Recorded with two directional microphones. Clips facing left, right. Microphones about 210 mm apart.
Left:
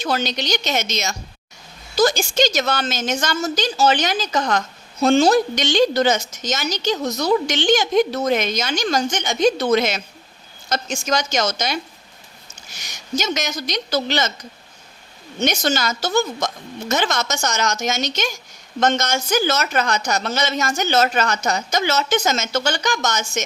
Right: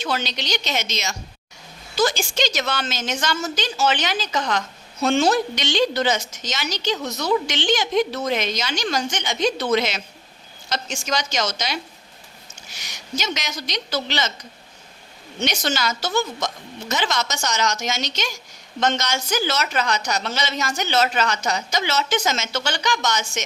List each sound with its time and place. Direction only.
0.0 s a woman's voice: 45° left (ahead or behind)
15.4 s a woman's voice: 45° left (ahead or behind)